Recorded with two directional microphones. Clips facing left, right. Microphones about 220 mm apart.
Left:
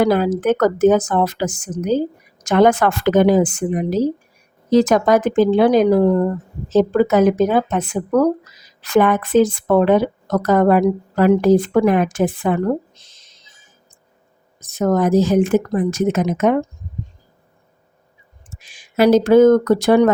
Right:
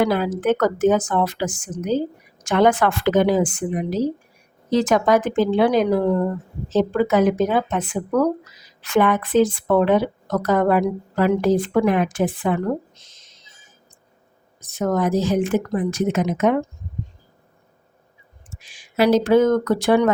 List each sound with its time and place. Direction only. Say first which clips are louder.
0.0 s a woman's voice: left 4 dB; 40° left (ahead or behind)
13.0 s a sound: even; 35° left (ahead or behind)
14.7 s a woman's voice: left 4 dB; 45° left (ahead or behind)
18.6 s a woman's voice: left 4 dB; 45° left (ahead or behind)